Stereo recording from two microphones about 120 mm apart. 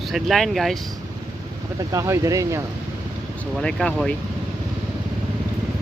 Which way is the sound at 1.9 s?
25° right (ahead or behind).